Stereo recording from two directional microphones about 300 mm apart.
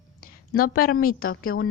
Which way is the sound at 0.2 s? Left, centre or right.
Left.